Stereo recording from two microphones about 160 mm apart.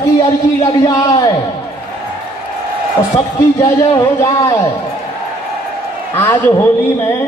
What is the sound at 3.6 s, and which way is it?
A man's voice, 20° left (ahead or behind).